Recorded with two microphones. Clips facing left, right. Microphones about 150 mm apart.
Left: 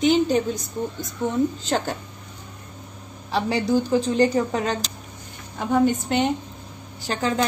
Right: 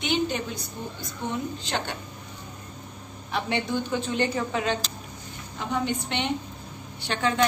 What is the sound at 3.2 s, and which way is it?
A woman's voice, 35° left (ahead or behind).